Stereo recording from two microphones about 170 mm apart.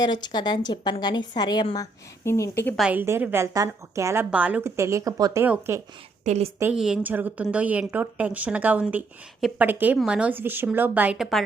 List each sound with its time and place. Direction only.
0.0 s a woman's voice: 25° left (ahead or behind)
2.7 s a woman's voice: 5° right (ahead or behind)
6.2 s a woman's voice: 40° right (ahead or behind)
6.6 s a woman's voice: 5° right (ahead or behind)